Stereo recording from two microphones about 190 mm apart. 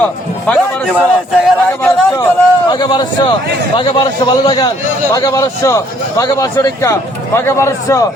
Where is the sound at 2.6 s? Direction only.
20° left (ahead or behind).